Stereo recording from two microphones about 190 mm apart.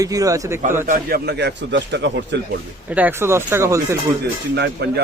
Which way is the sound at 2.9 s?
10° right (ahead or behind).